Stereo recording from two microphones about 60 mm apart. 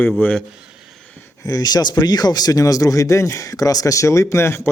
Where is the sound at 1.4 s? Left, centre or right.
Left.